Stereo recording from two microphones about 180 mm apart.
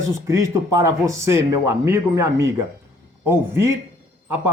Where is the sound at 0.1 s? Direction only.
15° right (ahead or behind).